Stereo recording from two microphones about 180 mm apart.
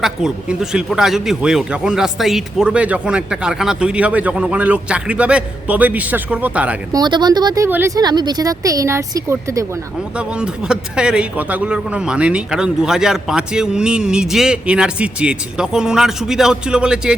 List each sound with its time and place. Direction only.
0.0 s a man's voice: 5° right (ahead or behind)
6.9 s speech: 25° right (ahead or behind)
10.2 s a man's voice: 5° right (ahead or behind)